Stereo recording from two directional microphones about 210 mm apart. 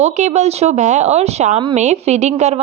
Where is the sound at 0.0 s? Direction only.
35° right (ahead or behind).